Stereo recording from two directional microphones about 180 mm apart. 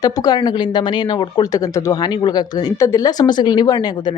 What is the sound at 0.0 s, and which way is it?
Speech, 20° left (ahead or behind).